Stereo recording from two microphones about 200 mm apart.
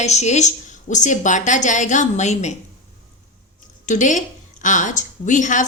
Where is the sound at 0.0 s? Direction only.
35° left (ahead or behind).